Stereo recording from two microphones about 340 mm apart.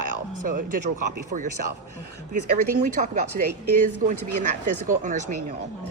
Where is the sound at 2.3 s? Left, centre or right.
Right.